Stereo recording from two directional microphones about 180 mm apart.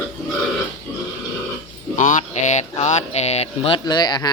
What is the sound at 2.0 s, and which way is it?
Speech, 40° left (ahead or behind).